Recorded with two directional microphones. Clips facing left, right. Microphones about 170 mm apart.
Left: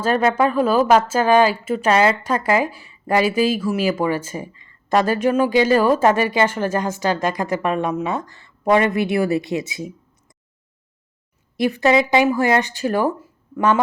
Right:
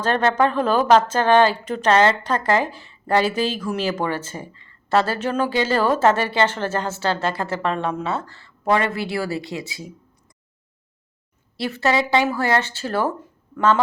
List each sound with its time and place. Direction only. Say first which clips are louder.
0.0 s speech: left 2 dB; 10° left (ahead or behind)
11.5 s speech: left 5 dB; 15° left (ahead or behind)